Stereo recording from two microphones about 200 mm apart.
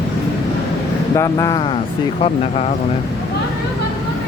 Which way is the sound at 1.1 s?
15° left (ahead or behind).